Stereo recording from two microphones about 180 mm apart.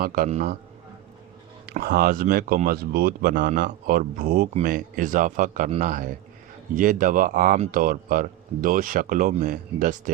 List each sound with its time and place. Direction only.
0.0 s speech: 50° right (ahead or behind)
1.8 s speech: 60° right (ahead or behind)